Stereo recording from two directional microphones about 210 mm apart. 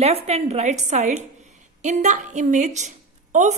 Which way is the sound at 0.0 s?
30° right (ahead or behind).